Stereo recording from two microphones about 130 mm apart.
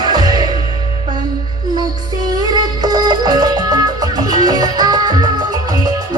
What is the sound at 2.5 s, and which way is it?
Music, 30° right (ahead or behind).